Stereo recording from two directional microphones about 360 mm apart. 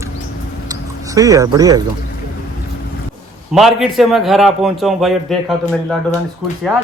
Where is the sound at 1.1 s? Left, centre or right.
Centre.